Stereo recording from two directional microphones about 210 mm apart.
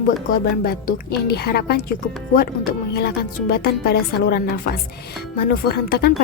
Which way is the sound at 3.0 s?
50° left (ahead or behind).